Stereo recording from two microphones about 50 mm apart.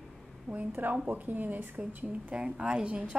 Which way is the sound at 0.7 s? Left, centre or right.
Right.